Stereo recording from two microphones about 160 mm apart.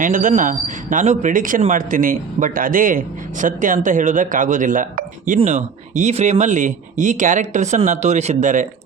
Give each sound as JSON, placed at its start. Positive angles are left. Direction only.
{"t": 0.0, "sound": "a man's voice", "side_deg": -55}